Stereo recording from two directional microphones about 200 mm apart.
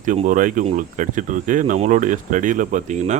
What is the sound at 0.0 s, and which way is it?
Speech, 40° right (ahead or behind).